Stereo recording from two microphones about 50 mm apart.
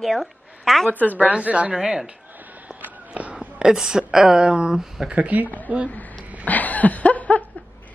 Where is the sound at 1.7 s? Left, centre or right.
Centre.